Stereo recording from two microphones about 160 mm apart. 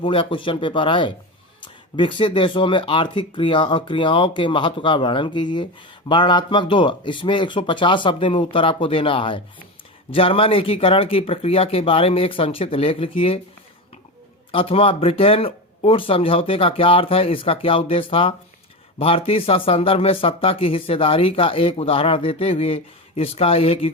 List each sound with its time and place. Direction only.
0.0 s speech: 35° left (ahead or behind)
14.5 s speech: 35° left (ahead or behind)